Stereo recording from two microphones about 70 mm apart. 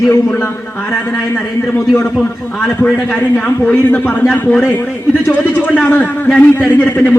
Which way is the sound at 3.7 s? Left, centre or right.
Left.